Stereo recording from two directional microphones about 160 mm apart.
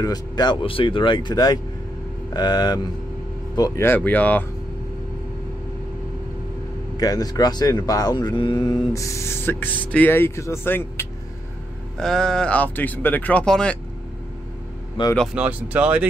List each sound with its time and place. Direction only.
0.0 s speech: 25° left (ahead or behind); by 4.5 s 10° left (ahead or behind)
7.0 s speech: 25° left (ahead or behind)
12.0 s speech: 5° left (ahead or behind)
15.0 s speech: 30° left (ahead or behind)
15.3 s speech: 10° right (ahead or behind)